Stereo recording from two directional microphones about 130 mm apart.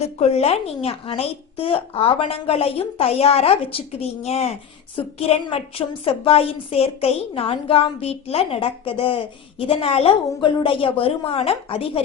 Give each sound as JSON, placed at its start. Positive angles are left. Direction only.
{"t": 0.0, "sound": "a woman's voice", "side_deg": 55}
{"t": 4.9, "sound": "a woman's voice", "side_deg": 45}